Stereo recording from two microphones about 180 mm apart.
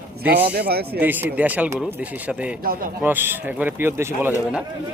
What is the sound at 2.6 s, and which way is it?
Speech, 55° right (ahead or behind).